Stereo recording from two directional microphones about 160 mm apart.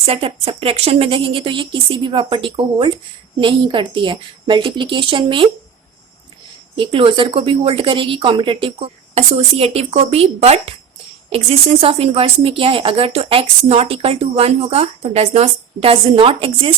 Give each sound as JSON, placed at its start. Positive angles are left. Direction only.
{"t": 0.0, "sound": "speech", "side_deg": -35}
{"t": 6.7, "sound": "speech", "side_deg": -35}